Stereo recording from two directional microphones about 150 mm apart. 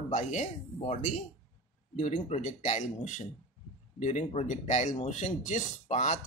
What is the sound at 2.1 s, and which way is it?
Speech, 50° left (ahead or behind).